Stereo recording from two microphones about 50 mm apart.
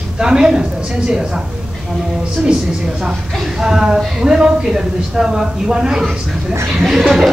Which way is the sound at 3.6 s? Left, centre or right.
Centre.